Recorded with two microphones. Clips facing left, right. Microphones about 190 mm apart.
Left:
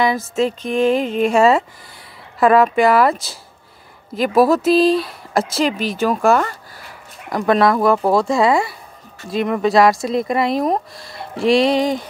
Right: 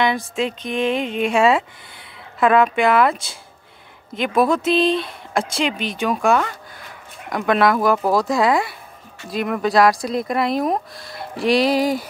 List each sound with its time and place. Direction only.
0.0 s music: centre (ahead or behind)
0.7 s speech: centre (ahead or behind)